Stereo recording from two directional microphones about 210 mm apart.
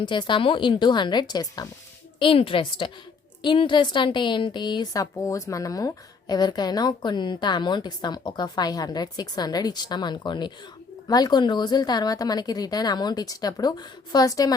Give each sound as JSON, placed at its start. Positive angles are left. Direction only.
{"t": 0.0, "sound": "a woman's voice", "side_deg": 20}